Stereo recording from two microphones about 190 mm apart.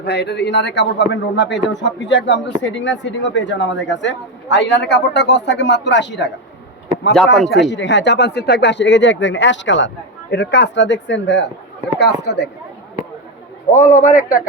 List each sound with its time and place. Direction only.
0.0 s a man's voice: 60° left (ahead or behind)
7.3 s a man's voice: centre (ahead or behind)
7.7 s a man's voice: 70° left (ahead or behind)
13.7 s a man's voice: 45° left (ahead or behind)